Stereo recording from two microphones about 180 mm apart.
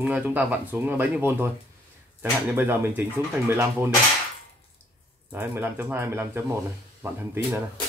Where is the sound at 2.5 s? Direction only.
10° right (ahead or behind).